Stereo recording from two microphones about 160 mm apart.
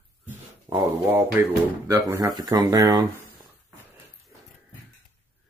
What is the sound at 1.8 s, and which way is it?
Speech, 20° right (ahead or behind).